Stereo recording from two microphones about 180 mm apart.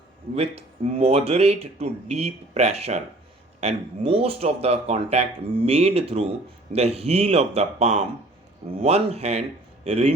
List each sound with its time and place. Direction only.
0.3 s speech: 35° right (ahead or behind)